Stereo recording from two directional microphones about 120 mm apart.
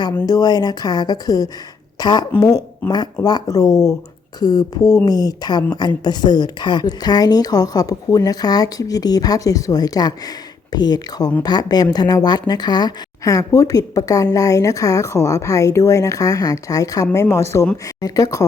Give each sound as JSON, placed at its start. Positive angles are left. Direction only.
{"t": 0.3, "sound": "a woman's voice", "side_deg": 35}
{"t": 2.8, "sound": "speech", "side_deg": 15}
{"t": 3.2, "sound": "a woman's voice", "side_deg": 30}